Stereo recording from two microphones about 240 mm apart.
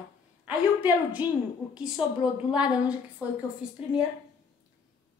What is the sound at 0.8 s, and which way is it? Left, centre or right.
Speech, centre.